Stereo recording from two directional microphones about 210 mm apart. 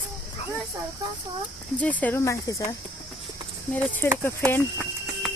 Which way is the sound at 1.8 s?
5° left (ahead or behind).